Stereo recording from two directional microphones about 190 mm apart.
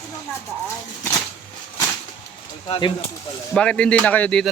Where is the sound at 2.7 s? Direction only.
25° left (ahead or behind).